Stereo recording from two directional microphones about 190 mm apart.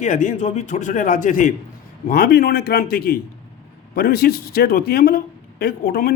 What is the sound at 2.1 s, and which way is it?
Speech, 55° left (ahead or behind).